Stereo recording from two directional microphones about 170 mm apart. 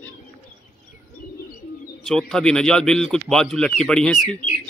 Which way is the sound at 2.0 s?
5° left (ahead or behind).